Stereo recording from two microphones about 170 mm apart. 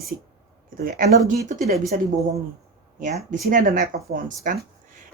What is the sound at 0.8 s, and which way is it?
Speech, 55° right (ahead or behind).